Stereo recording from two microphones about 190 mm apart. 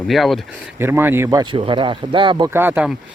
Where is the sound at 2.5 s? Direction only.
10° right (ahead or behind).